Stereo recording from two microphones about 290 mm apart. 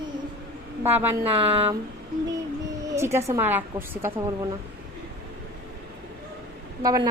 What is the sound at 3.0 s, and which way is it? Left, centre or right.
A woman's voice, centre.